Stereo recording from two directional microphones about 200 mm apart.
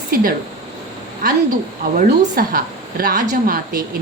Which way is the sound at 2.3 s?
45° right (ahead or behind).